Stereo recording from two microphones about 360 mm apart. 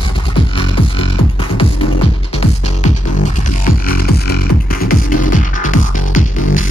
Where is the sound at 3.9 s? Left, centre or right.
Left.